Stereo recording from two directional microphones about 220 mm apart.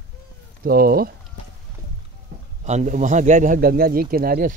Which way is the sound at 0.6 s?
40° right (ahead or behind).